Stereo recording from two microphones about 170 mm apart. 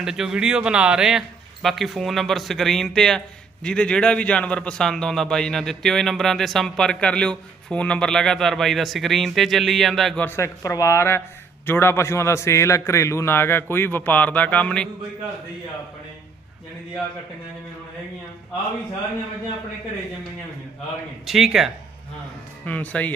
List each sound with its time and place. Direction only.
0.0 s a man's voice: 5° right (ahead or behind)
10.2 s a man's voice: 15° left (ahead or behind)
21.2 s a man's voice: centre (ahead or behind)